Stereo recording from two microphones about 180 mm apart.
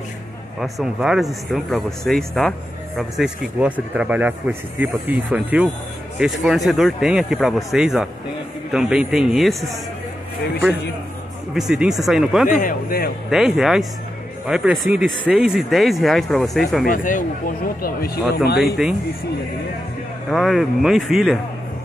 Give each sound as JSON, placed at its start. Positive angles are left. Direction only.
{"t": 0.6, "sound": "speech", "side_deg": 0}
{"t": 11.5, "sound": "speech", "side_deg": 0}
{"t": 12.4, "sound": "speech", "side_deg": 50}
{"t": 13.3, "sound": "speech", "side_deg": -5}
{"t": 16.8, "sound": "speech", "side_deg": 50}
{"t": 18.8, "sound": "speech", "side_deg": 0}
{"t": 20.2, "sound": "speech", "side_deg": 0}